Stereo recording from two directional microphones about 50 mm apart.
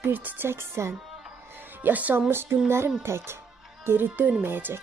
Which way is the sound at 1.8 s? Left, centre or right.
Right.